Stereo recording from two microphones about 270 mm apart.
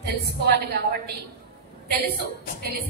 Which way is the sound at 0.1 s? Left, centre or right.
Right.